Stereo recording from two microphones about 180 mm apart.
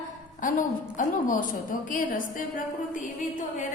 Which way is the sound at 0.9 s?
50° left (ahead or behind).